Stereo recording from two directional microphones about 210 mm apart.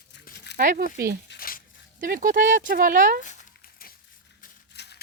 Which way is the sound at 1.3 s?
45° left (ahead or behind).